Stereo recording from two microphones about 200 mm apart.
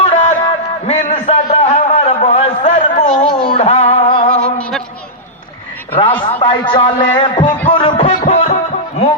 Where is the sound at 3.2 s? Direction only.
25° left (ahead or behind).